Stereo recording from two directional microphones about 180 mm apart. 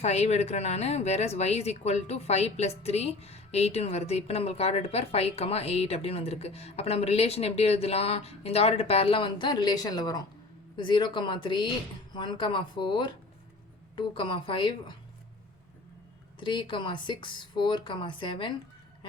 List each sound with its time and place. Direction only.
0.0 s speech: 35° left (ahead or behind)
16.4 s speech: 25° left (ahead or behind)